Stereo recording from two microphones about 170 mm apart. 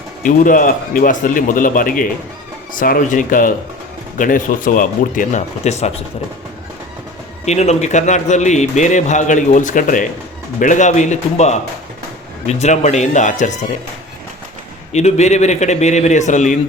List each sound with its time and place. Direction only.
0.2 s a man's voice: 55° left (ahead or behind)
7.4 s a man's voice: 40° left (ahead or behind)
14.9 s a man's voice: 40° left (ahead or behind)